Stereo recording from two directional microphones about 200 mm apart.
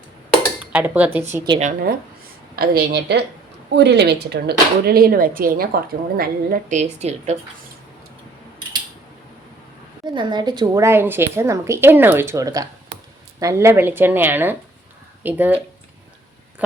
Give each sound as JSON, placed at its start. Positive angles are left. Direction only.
{"t": 0.6, "sound": "a woman's voice", "side_deg": -5}
{"t": 1.5, "sound": "speech", "side_deg": -35}
{"t": 2.6, "sound": "speech", "side_deg": -50}
{"t": 10.2, "sound": "a woman's voice", "side_deg": -20}